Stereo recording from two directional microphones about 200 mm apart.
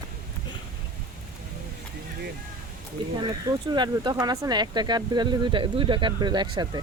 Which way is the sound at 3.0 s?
25° right (ahead or behind).